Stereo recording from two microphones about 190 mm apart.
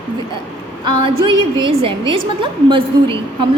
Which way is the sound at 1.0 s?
25° right (ahead or behind).